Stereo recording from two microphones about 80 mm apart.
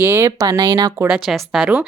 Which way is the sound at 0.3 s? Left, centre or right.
Right.